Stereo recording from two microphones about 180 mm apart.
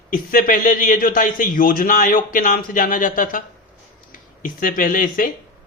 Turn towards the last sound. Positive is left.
turn(degrees=50)  # may be behind; listen again after turning